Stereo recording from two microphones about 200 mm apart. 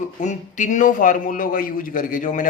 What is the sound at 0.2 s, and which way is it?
A man's voice, 40° left (ahead or behind).